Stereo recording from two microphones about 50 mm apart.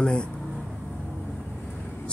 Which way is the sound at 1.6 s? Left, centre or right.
Left.